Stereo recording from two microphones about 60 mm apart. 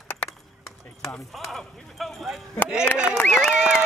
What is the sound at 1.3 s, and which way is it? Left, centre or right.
Clip-clop, centre.